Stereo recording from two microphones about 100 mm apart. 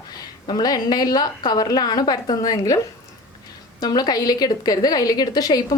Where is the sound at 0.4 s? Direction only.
45° left (ahead or behind).